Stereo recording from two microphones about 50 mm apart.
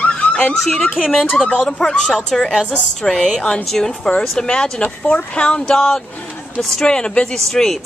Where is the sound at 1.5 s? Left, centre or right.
Centre.